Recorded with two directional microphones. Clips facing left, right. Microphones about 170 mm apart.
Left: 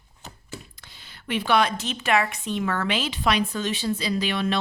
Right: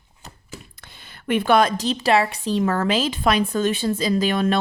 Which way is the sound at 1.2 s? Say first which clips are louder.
Right 5 dB; 50° right (ahead or behind).